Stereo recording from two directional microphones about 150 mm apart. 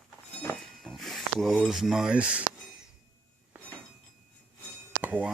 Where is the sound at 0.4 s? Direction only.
5° left (ahead or behind).